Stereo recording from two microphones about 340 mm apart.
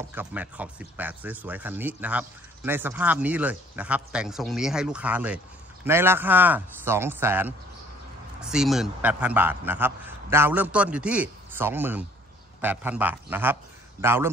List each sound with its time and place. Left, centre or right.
0.1 s a man's voice: centre